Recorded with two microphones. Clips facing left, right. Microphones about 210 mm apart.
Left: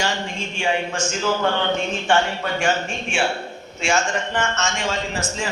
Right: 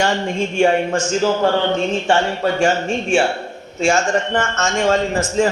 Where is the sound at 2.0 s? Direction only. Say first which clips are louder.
Right 1 dB; 30° right (ahead or behind).